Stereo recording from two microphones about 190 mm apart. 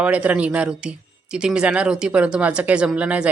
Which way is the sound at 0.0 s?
5° right (ahead or behind).